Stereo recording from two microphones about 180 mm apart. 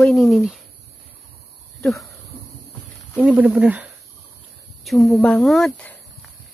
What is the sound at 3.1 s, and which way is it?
Speech, 5° right (ahead or behind).